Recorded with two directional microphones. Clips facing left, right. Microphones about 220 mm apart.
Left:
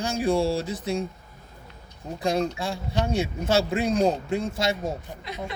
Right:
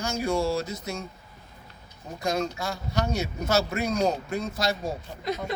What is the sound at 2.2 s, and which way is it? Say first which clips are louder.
Speech: left 3 dB; 30° left (ahead or behind).